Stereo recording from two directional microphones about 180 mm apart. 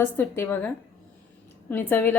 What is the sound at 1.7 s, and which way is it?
Speech, 10° left (ahead or behind).